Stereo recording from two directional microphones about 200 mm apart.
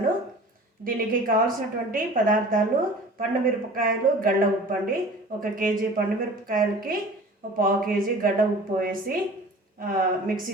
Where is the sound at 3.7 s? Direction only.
45° right (ahead or behind).